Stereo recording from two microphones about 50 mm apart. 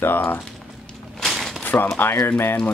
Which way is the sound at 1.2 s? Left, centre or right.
Centre.